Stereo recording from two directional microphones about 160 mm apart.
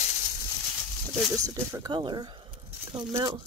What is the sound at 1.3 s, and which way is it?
Speech, 20° right (ahead or behind).